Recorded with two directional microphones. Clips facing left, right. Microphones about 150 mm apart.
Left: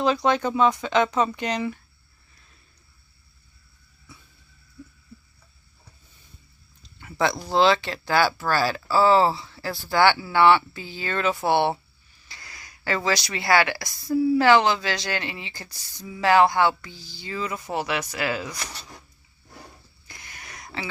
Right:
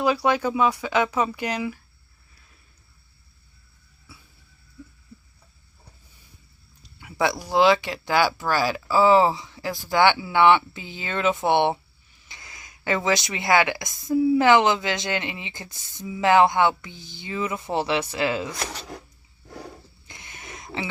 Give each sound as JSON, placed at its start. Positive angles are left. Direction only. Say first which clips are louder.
{"t": 0.0, "sound": "speech", "louder": "even", "side_deg": -10}
{"t": 6.8, "sound": "speech", "louder": "even", "side_deg": -10}
{"t": 18.5, "sound": "speech", "louder": "right 6 dB", "side_deg": -60}
{"t": 20.1, "sound": "a sound", "louder": "right 2 dB", "side_deg": -20}